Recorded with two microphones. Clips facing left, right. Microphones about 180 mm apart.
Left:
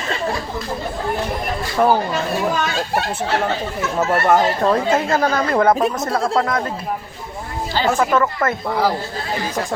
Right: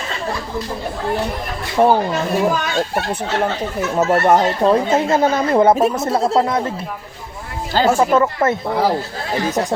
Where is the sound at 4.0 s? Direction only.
20° right (ahead or behind).